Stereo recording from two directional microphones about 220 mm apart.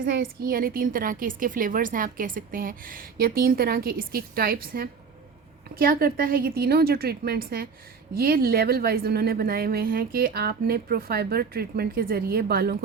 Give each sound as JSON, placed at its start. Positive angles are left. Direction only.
{"t": 0.0, "sound": "a woman's voice", "side_deg": -40}